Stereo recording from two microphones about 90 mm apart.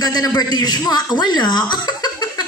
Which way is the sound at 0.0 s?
50° left (ahead or behind).